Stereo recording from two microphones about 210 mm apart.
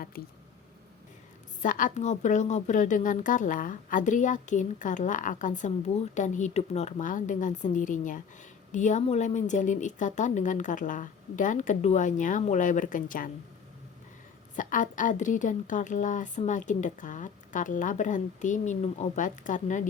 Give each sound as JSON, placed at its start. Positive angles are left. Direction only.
{"t": 0.1, "sound": "speech", "side_deg": 45}
{"t": 1.6, "sound": "a woman's voice", "side_deg": 40}
{"t": 14.5, "sound": "a woman's voice", "side_deg": 40}